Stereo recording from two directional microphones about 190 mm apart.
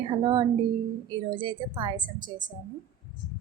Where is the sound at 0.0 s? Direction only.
25° right (ahead or behind).